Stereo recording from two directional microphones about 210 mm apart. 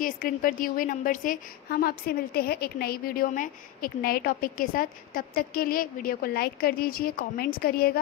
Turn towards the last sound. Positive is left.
turn(degrees=45)  # may be behind; listen again after turning